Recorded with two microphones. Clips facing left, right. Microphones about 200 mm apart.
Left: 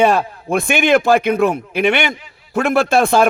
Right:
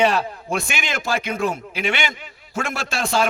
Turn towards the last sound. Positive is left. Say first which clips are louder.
# left 9 dB
turn(degrees=55)  # may be behind; listen again after turning